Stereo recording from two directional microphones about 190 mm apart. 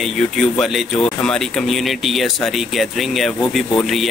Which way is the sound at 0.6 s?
Centre (ahead or behind).